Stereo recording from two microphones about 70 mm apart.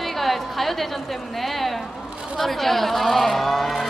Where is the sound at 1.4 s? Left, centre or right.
Centre.